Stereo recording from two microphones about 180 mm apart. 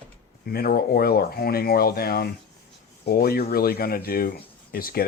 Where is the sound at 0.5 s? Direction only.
55° left (ahead or behind).